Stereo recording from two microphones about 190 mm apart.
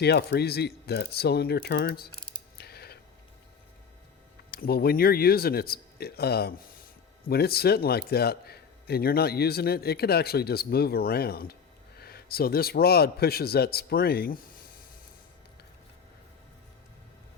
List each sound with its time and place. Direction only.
0.0 s a man's voice: 60° left (ahead or behind)
2.6 s a sound: 55° left (ahead or behind)
4.5 s a man's voice: 55° left (ahead or behind)